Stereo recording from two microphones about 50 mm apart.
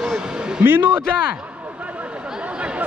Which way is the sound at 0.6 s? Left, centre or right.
Right.